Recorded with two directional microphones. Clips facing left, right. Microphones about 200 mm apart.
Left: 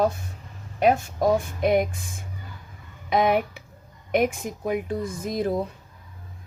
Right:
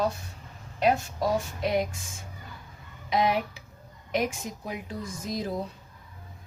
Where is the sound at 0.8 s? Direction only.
50° left (ahead or behind).